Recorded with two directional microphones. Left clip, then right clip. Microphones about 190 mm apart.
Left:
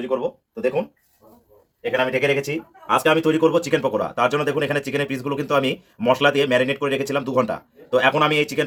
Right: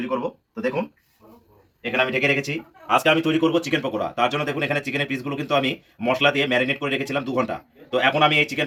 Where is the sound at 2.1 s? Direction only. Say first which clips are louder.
Left 1 dB; 45° left (ahead or behind).